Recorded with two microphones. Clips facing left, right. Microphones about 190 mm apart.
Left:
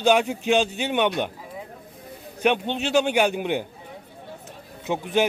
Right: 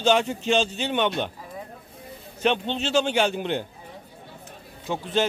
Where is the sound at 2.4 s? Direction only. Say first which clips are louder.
Left 2 dB; 10° left (ahead or behind).